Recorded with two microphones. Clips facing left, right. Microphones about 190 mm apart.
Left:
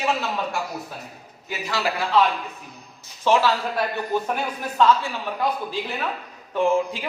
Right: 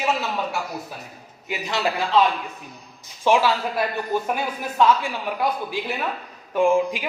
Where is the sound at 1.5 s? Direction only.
20° right (ahead or behind).